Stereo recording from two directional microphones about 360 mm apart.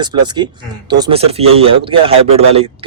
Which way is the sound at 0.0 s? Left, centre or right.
Centre.